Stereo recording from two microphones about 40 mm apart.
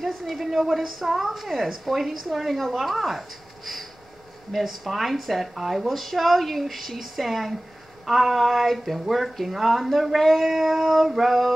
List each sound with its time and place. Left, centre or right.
0.0 s a woman's voice: centre